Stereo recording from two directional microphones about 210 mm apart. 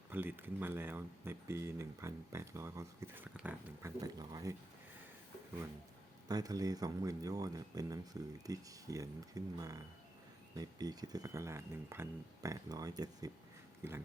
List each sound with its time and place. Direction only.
0.1 s speech: 10° right (ahead or behind)
4.0 s speech: 15° right (ahead or behind)
6.2 s speech: 15° right (ahead or behind)